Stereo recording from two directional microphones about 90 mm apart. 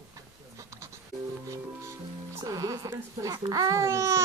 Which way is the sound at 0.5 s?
35° right (ahead or behind).